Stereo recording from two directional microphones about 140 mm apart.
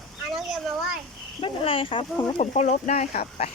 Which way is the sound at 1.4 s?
40° left (ahead or behind).